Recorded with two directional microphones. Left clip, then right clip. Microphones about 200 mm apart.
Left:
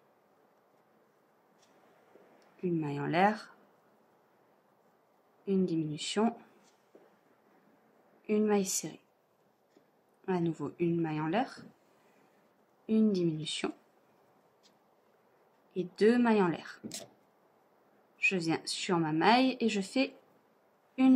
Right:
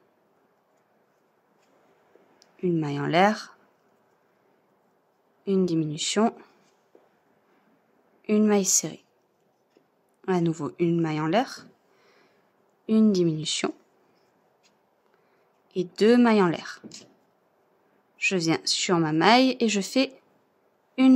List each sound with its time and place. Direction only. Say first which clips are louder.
2.4 s speech: right 7 dB; 50° right (ahead or behind)
5.4 s a woman's voice: right 7 dB; 50° right (ahead or behind)
8.3 s a woman's voice: right 7 dB; 50° right (ahead or behind)
10.2 s a woman's voice: right 7 dB; 50° right (ahead or behind)
12.8 s a woman's voice: right 7 dB; 50° right (ahead or behind)
15.7 s a woman's voice: right 7 dB; 50° right (ahead or behind)
18.1 s a woman's voice: right 6 dB; 50° right (ahead or behind)